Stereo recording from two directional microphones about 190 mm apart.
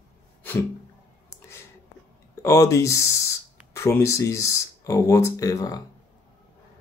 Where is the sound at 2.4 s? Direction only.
15° left (ahead or behind).